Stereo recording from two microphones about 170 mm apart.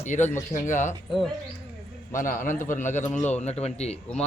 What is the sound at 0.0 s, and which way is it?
Speech, 45° left (ahead or behind).